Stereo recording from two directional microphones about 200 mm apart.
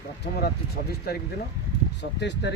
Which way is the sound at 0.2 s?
55° left (ahead or behind).